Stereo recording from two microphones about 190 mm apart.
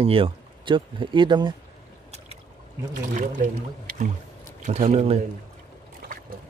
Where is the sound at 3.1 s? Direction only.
40° right (ahead or behind).